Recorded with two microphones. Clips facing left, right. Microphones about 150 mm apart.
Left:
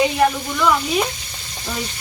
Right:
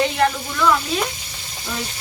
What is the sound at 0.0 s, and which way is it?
Speech, 10° left (ahead or behind).